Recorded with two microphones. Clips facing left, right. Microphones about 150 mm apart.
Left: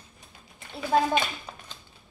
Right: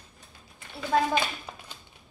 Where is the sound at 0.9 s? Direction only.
20° left (ahead or behind).